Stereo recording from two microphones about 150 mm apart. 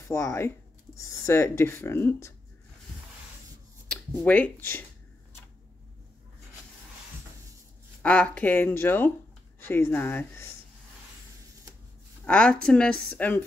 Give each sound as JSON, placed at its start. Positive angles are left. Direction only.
{"t": 0.1, "sound": "speech", "side_deg": 20}
{"t": 4.2, "sound": "speech", "side_deg": 10}
{"t": 8.0, "sound": "speech", "side_deg": 10}
{"t": 12.3, "sound": "speech", "side_deg": 5}